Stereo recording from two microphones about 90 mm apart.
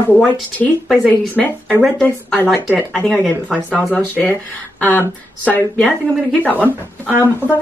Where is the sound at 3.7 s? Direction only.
15° left (ahead or behind).